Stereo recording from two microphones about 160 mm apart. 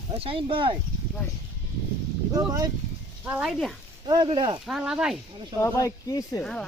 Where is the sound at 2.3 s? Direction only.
20° right (ahead or behind).